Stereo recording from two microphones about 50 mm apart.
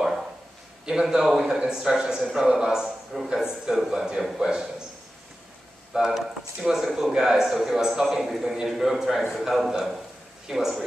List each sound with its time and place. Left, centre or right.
0.8 s a man's voice: centre
5.9 s a man's voice: centre